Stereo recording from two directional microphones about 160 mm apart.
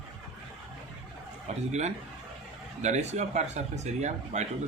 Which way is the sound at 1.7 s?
45° right (ahead or behind).